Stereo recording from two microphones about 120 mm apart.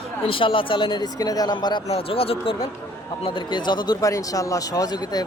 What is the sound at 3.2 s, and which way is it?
A man's voice, 40° left (ahead or behind).